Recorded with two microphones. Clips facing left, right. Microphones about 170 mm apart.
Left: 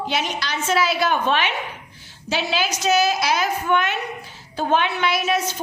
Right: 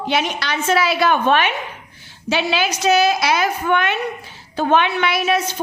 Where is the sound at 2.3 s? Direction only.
65° right (ahead or behind).